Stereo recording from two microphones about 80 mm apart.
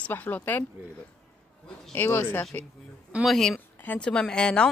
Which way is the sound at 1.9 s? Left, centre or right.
Left.